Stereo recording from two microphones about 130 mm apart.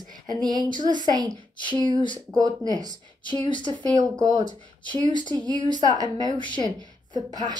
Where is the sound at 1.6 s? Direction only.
35° left (ahead or behind).